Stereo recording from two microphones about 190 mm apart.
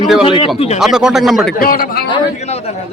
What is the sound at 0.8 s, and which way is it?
Speech, 5° right (ahead or behind).